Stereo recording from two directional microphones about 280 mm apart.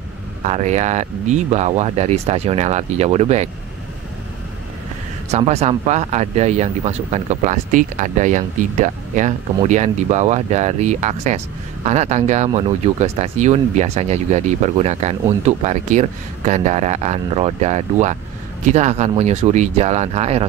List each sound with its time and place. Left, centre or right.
0.5 s speech: right
5.3 s speech: right